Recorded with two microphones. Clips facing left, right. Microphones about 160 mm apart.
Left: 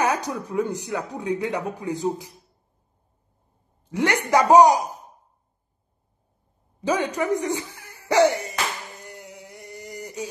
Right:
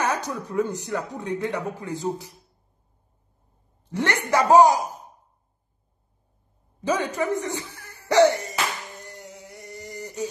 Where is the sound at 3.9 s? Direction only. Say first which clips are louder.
Left 3 dB; 15° left (ahead or behind).